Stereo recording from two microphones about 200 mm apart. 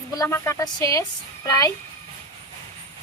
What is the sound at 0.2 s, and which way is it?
Speech, 15° left (ahead or behind).